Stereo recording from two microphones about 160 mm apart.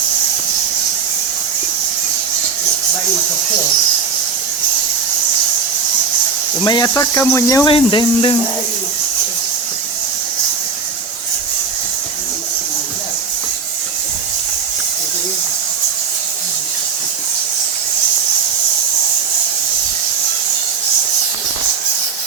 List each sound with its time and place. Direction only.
6.7 s speech: 25° left (ahead or behind)
7.7 s speech: 30° left (ahead or behind)